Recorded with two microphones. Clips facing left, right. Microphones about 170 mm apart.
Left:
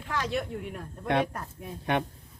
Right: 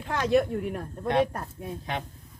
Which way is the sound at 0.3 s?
45° right (ahead or behind).